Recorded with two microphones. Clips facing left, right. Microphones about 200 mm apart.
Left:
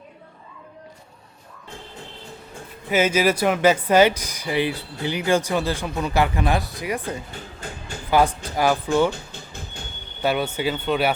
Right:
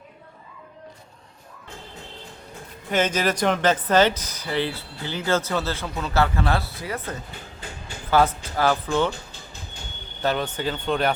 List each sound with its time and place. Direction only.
2.9 s speech: 10° left (ahead or behind)
10.2 s speech: 10° left (ahead or behind)